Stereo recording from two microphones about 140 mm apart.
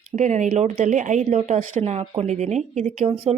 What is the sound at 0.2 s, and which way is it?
Speech, 55° right (ahead or behind).